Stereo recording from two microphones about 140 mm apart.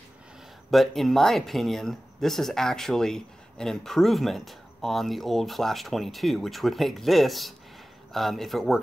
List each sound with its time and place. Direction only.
0.7 s speech: centre (ahead or behind)